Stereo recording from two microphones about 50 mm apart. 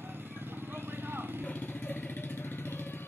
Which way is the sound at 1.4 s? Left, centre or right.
Left.